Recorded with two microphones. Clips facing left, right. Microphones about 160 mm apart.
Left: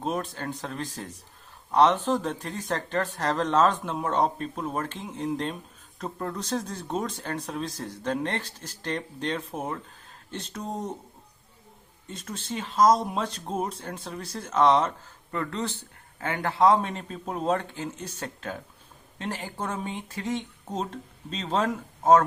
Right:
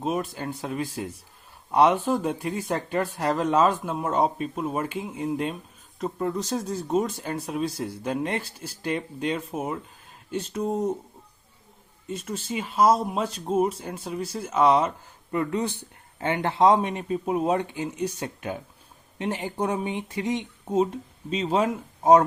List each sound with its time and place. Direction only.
0.0 s speech: 5° right (ahead or behind)
12.0 s speech: 5° right (ahead or behind)